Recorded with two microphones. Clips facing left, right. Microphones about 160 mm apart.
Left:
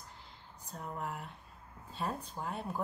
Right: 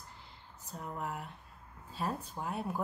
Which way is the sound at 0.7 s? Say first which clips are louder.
Right 1 dB; centre (ahead or behind).